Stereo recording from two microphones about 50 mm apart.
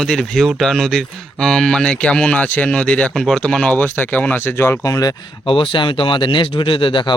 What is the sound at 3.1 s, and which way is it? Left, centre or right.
Speech, centre.